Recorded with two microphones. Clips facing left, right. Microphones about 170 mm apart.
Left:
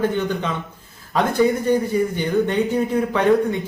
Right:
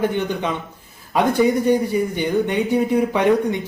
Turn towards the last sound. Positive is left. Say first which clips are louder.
# even
turn(degrees=-15)  # may be behind; listen again after turning